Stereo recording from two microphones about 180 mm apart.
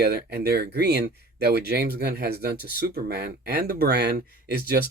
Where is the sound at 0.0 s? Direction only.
60° right (ahead or behind).